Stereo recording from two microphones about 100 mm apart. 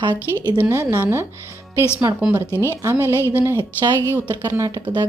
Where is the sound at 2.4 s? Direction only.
25° left (ahead or behind).